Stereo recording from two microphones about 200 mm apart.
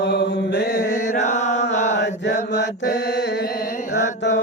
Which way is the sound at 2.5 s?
55° left (ahead or behind).